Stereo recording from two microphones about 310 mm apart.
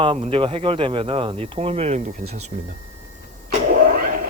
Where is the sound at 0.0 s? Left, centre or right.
Centre.